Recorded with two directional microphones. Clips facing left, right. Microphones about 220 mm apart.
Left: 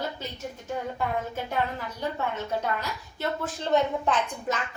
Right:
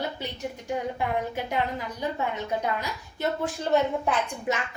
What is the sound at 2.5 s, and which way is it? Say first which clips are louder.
Speech: right 1 dB; 15° right (ahead or behind).